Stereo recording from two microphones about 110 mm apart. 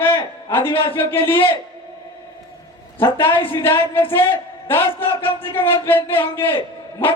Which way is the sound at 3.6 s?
20° left (ahead or behind).